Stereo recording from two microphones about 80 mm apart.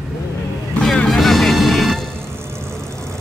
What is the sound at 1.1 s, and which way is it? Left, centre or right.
Music, centre.